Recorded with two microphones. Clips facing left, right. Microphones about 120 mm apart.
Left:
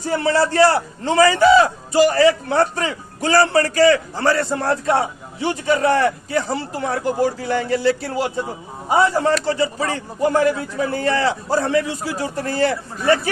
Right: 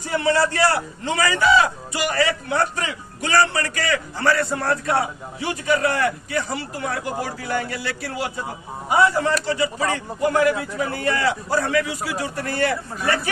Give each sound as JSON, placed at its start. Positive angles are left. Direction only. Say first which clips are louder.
{"t": 0.0, "sound": "a man's voice", "louder": "left 2 dB", "side_deg": 35}